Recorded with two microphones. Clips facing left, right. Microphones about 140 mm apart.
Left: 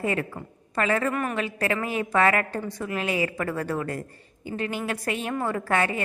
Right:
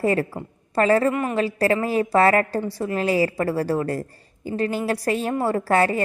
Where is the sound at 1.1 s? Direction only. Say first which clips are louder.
Right 4 dB; 20° right (ahead or behind).